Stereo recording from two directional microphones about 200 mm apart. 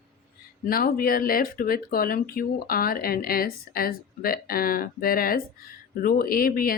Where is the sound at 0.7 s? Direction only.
45° left (ahead or behind).